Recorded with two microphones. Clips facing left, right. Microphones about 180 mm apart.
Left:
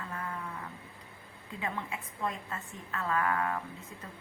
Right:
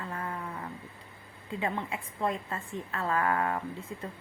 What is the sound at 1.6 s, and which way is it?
A woman's voice, 30° right (ahead or behind).